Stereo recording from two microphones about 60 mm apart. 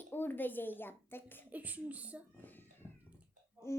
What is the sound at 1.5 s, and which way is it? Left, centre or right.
Speech, right.